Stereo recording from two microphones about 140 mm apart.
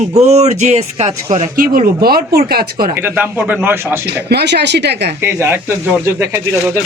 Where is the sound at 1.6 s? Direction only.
90° right.